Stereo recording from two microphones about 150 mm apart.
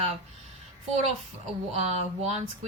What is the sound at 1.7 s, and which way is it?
Speech, 45° right (ahead or behind).